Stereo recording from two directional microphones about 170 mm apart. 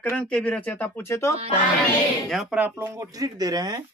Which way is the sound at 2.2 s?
5° right (ahead or behind).